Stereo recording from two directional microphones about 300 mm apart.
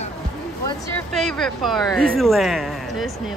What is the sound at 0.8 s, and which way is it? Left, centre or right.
Speech, centre.